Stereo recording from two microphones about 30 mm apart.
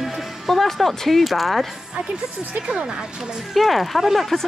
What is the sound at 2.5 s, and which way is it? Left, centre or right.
Speech, right.